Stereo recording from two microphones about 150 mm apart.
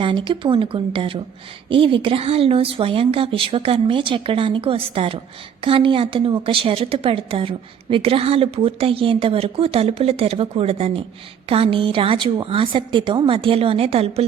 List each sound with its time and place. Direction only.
0.0 s a woman's voice: 35° right (ahead or behind)